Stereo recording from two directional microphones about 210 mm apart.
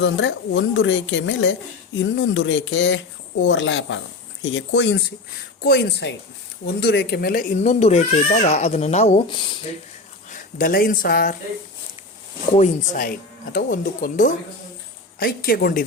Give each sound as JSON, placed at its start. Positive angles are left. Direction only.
{"t": 0.0, "sound": "a woman's voice", "side_deg": 60}
{"t": 10.2, "sound": "speech", "side_deg": 40}
{"t": 12.5, "sound": "speech", "side_deg": 35}